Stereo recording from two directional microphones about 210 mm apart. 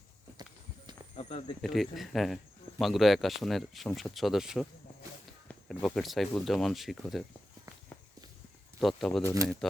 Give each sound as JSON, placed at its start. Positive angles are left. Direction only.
{"t": 1.1, "sound": "speech", "side_deg": 30}
{"t": 1.6, "sound": "speech", "side_deg": 0}
{"t": 8.8, "sound": "speech", "side_deg": 0}